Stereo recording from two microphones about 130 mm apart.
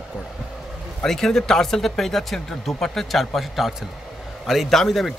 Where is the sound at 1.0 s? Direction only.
5° left (ahead or behind).